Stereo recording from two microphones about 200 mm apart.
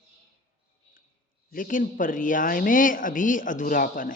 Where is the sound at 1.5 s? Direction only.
40° left (ahead or behind).